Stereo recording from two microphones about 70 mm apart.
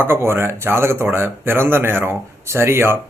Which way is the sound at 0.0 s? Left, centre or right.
Right.